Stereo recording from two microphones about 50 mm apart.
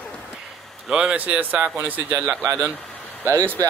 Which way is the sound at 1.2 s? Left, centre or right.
Right.